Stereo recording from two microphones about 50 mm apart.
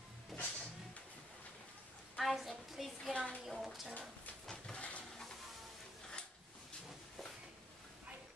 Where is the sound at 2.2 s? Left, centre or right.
Centre.